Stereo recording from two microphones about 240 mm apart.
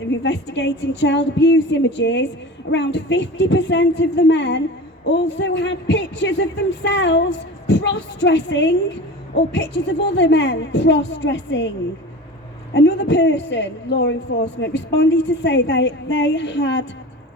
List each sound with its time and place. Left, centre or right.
0.2 s a woman's voice: left
12.7 s a woman's voice: left